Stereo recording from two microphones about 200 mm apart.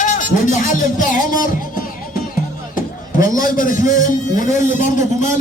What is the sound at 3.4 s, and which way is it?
A man's voice, 45° left (ahead or behind).